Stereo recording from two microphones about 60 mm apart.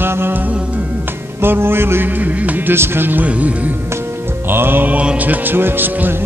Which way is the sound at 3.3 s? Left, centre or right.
Right.